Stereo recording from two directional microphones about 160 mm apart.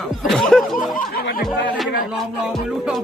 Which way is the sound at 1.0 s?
65° left (ahead or behind).